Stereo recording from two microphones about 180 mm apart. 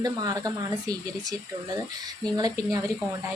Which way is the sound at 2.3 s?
20° right (ahead or behind).